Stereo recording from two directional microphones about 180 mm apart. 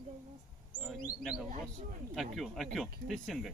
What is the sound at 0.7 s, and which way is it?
Speech, centre (ahead or behind).